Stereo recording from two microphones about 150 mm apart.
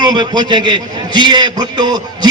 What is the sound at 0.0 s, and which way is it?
A man's voice, 30° right (ahead or behind).